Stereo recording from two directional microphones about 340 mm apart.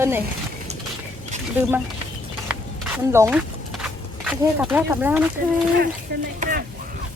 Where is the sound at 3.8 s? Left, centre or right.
Centre.